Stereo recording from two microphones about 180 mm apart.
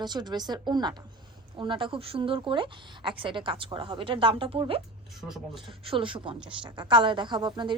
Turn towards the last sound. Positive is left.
turn(degrees=-25)  # may be behind; listen again after turning